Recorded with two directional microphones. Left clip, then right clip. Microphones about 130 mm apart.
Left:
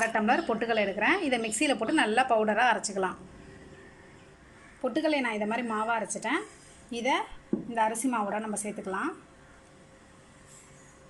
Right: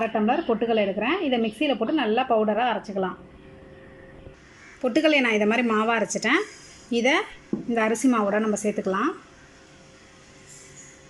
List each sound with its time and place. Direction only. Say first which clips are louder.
0.0 s a woman's voice: right 2 dB; 25° right (ahead or behind)
4.8 s a woman's voice: right 7 dB; 25° right (ahead or behind)